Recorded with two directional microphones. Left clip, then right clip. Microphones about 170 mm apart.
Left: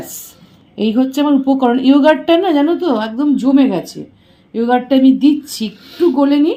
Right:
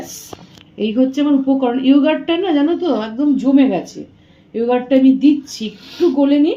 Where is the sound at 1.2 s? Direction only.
60° left (ahead or behind).